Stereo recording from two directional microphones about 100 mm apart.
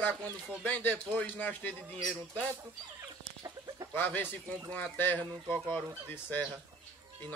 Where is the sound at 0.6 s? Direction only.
20° left (ahead or behind).